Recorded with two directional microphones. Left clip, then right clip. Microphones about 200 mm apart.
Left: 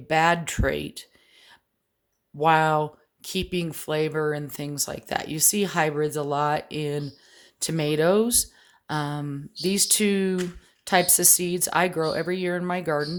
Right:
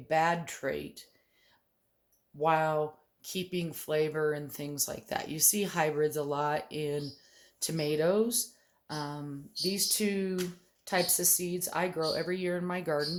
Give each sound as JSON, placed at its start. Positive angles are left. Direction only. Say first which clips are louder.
{"t": 0.1, "sound": "speech", "louder": "left 7 dB", "side_deg": 45}
{"t": 2.4, "sound": "speech", "louder": "left 8 dB", "side_deg": 45}